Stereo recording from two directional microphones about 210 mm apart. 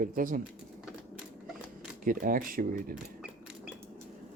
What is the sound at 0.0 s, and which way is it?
Speech, 40° right (ahead or behind).